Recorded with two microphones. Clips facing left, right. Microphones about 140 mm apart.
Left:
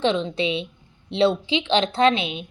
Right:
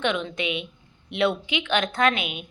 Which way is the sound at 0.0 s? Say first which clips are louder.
Left 4 dB; 30° left (ahead or behind).